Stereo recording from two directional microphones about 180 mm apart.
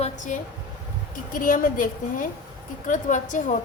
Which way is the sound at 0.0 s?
45° left (ahead or behind).